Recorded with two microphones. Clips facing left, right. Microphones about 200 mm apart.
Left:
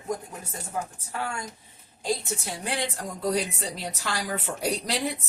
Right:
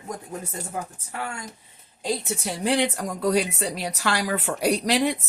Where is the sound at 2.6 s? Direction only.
80° right.